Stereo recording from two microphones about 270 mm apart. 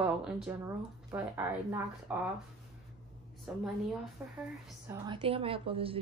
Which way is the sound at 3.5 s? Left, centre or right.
Centre.